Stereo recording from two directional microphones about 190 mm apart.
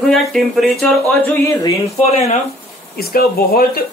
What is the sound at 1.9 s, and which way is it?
Speech, 35° left (ahead or behind).